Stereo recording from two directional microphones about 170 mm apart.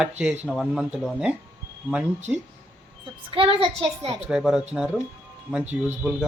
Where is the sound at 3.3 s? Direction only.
30° right (ahead or behind).